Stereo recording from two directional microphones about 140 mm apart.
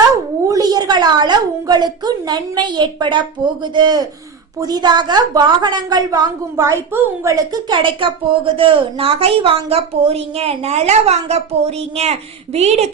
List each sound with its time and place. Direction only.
0.4 s a woman's voice: 25° right (ahead or behind); by 12.9 s 50° right (ahead or behind)